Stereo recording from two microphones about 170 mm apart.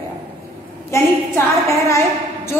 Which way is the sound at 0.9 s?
15° left (ahead or behind).